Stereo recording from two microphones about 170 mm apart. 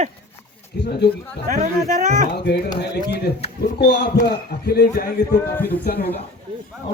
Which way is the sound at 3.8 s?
70° left (ahead or behind).